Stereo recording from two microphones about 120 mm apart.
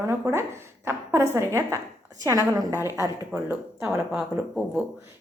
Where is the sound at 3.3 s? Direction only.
5° right (ahead or behind).